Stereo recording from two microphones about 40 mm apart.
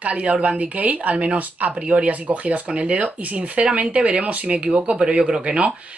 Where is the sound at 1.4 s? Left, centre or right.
Right.